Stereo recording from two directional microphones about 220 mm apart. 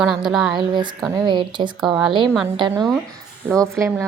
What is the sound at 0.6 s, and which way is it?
A woman's voice, 20° right (ahead or behind).